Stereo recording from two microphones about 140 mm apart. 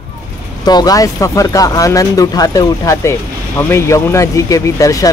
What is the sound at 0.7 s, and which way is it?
Speech, 30° left (ahead or behind).